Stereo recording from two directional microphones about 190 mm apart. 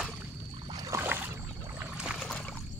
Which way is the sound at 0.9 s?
10° right (ahead or behind).